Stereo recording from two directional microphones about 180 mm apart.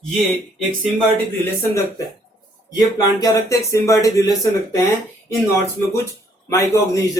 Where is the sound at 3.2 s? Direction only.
15° left (ahead or behind).